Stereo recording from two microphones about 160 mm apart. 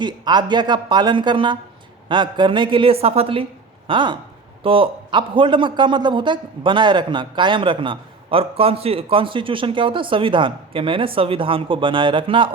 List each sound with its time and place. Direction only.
0.0 s a man's voice: 30° right (ahead or behind)